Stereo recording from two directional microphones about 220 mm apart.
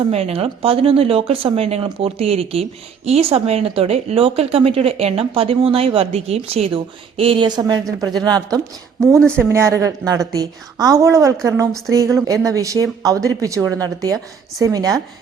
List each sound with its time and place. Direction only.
0.1 s speech: 25° right (ahead or behind)
9.1 s speech: 5° left (ahead or behind)
9.4 s speech: 15° right (ahead or behind)